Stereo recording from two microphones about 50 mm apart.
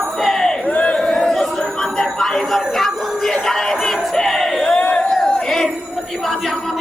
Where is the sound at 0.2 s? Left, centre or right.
Centre.